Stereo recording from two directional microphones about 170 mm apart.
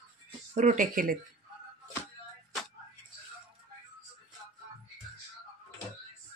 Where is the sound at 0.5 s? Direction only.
50° right (ahead or behind).